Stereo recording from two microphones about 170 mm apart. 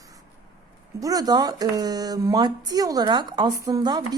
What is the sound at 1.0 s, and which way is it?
A woman's voice, 20° right (ahead or behind).